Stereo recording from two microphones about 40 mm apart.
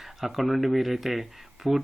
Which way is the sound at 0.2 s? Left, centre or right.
Centre.